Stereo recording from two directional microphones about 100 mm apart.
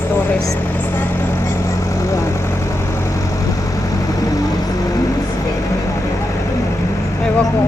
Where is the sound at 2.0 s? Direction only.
30° left (ahead or behind).